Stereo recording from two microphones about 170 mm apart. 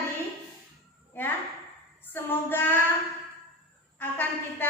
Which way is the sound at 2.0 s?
10° left (ahead or behind).